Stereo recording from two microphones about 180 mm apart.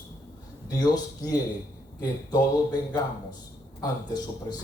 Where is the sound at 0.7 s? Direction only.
20° left (ahead or behind).